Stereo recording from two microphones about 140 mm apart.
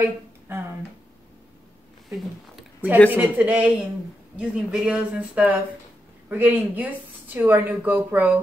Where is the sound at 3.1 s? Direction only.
10° right (ahead or behind).